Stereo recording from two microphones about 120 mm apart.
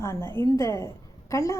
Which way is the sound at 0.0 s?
20° left (ahead or behind).